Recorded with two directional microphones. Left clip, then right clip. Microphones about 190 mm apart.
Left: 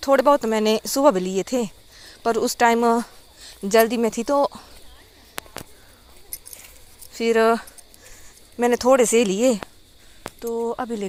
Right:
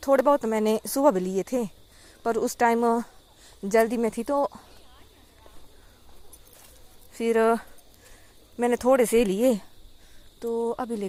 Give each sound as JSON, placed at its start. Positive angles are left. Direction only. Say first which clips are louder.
{"t": 0.0, "sound": "speech", "louder": "left 4 dB", "side_deg": -5}
{"t": 7.1, "sound": "speech", "louder": "left 4 dB", "side_deg": -5}
{"t": 10.7, "sound": "speech", "louder": "left 3 dB", "side_deg": -5}